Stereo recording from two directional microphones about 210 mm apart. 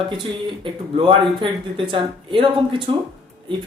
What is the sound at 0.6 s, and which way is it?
Speech, 25° right (ahead or behind).